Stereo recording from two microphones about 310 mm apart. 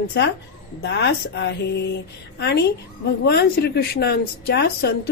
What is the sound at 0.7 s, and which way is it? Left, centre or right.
A woman's voice, left.